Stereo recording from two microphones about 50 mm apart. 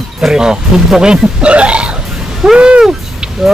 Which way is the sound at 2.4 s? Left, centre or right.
Centre.